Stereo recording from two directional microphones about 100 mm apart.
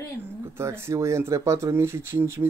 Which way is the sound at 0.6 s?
25° right (ahead or behind).